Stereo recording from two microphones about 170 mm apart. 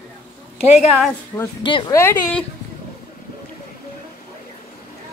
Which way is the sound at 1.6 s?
30° left (ahead or behind).